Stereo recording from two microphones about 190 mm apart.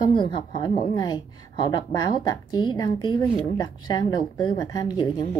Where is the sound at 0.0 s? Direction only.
25° left (ahead or behind).